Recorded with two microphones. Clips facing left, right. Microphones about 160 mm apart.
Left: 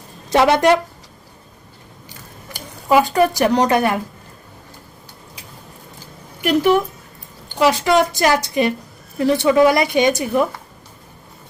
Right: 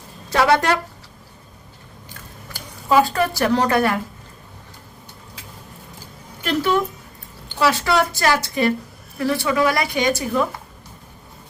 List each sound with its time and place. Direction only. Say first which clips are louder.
0.3 s a woman's voice: left 4 dB; 20° left (ahead or behind)
2.5 s speech: left 3 dB; 15° left (ahead or behind)
6.4 s a woman's voice: left 5 dB; 15° left (ahead or behind)